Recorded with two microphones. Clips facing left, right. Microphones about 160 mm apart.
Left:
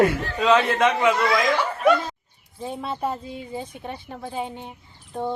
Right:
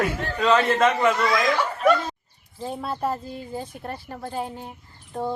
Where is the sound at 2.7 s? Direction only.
Centre (ahead or behind).